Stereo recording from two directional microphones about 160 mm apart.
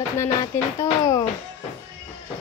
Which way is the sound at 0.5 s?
20° left (ahead or behind).